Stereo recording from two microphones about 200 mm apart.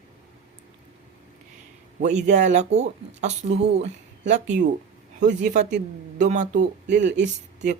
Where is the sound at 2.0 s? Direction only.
35° right (ahead or behind).